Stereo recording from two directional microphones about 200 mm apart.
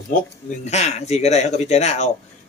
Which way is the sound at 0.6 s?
35° left (ahead or behind).